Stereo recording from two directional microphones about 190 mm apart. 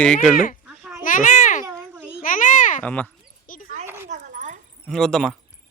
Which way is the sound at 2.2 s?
45° left (ahead or behind).